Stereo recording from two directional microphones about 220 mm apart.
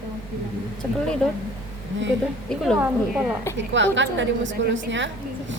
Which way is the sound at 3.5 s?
55° right (ahead or behind).